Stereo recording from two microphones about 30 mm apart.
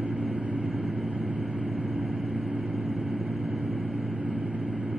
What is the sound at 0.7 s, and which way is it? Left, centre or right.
Vehicle, centre.